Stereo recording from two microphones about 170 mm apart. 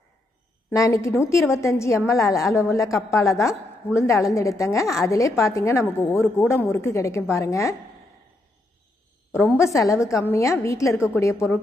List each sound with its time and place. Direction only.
0.7 s a woman's voice: 20° left (ahead or behind)
9.3 s a woman's voice: 15° left (ahead or behind)